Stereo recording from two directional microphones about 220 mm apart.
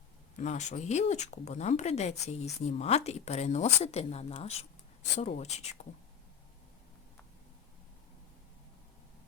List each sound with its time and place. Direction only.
0.3 s speech: 30° left (ahead or behind)